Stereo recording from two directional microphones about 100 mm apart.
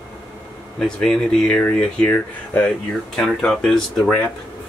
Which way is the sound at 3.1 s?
5° left (ahead or behind).